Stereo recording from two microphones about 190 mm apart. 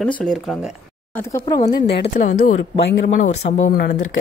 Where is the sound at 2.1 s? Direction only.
40° left (ahead or behind).